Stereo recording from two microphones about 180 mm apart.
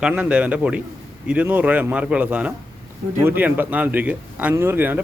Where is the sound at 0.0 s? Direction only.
5° right (ahead or behind).